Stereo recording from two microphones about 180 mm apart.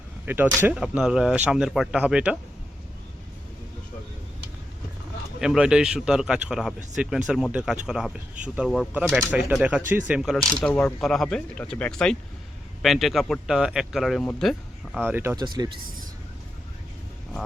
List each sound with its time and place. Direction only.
0.3 s speech: 10° right (ahead or behind)
5.4 s speech: 5° right (ahead or behind)
15.0 s speech: 10° right (ahead or behind)
15.4 s speech: 20° right (ahead or behind)